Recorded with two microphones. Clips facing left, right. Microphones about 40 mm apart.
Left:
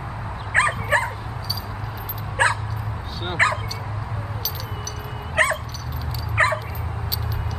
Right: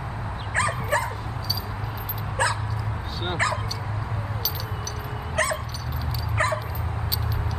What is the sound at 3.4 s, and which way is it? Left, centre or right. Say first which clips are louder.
Speech: left 6 dB; left.